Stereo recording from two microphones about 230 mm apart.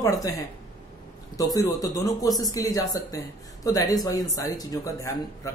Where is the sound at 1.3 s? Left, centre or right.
Centre.